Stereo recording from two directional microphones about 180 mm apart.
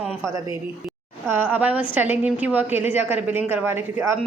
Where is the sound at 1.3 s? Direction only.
10° right (ahead or behind).